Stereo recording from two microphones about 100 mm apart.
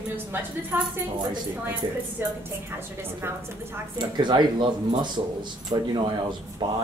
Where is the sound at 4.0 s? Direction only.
50° right (ahead or behind).